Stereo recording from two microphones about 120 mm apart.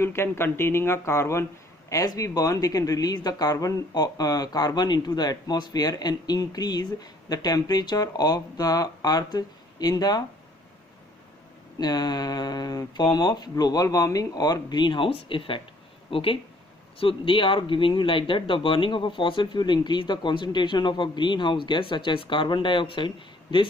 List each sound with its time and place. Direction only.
0.0 s speech: 20° left (ahead or behind)
11.8 s speech: 35° left (ahead or behind)